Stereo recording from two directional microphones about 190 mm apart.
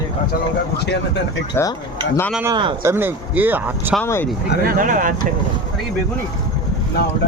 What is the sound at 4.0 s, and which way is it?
Speech, 15° left (ahead or behind).